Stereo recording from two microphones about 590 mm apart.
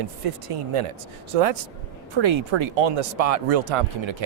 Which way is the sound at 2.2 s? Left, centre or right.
Right.